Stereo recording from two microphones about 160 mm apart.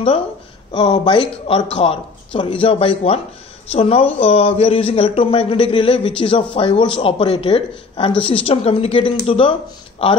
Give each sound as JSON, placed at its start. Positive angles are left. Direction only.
{"t": 0.7, "sound": "speech", "side_deg": 35}